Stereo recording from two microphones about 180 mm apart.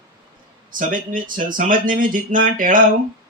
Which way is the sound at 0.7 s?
50° right (ahead or behind).